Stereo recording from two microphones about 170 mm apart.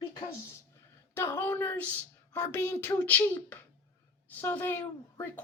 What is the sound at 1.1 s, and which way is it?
A child's voice, 15° left (ahead or behind).